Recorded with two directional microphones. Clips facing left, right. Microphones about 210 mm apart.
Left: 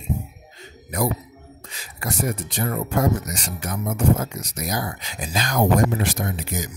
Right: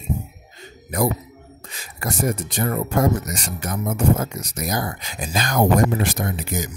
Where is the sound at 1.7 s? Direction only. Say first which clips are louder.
Right 2 dB; 50° right (ahead or behind).